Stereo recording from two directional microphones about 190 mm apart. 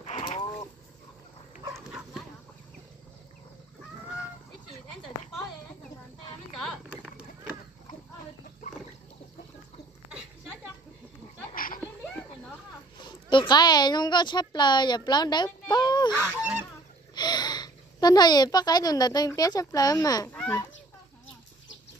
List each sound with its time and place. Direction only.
0.0 s a sound: 35° left (ahead or behind)
1.9 s dog: 5° right (ahead or behind)
11.5 s a sound: 50° left (ahead or behind)
13.0 s a child's voice: 25° left (ahead or behind)
16.2 s goose: 10° right (ahead or behind)
17.1 s a woman's voice: 20° left (ahead or behind)
20.3 s fowl: 10° left (ahead or behind)